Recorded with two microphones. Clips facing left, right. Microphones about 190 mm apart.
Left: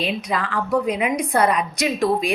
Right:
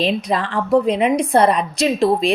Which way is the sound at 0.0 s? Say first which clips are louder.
Right 5 dB; 35° right (ahead or behind).